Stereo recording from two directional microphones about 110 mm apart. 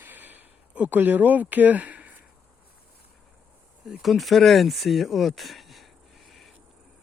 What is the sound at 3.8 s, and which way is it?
Speech, centre (ahead or behind).